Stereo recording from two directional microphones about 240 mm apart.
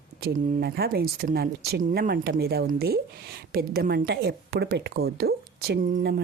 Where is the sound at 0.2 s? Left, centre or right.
Right.